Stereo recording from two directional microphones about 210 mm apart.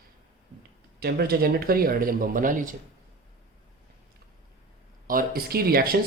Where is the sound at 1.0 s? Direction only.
50° right (ahead or behind).